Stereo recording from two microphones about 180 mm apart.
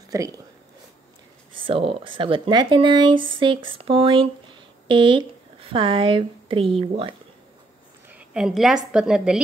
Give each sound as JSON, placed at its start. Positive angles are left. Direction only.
{"t": 0.1, "sound": "speech", "side_deg": -20}
{"t": 1.5, "sound": "speech", "side_deg": -30}
{"t": 8.1, "sound": "a woman's voice", "side_deg": -5}